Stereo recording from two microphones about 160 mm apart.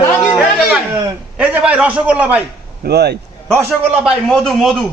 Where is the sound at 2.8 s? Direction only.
90° right.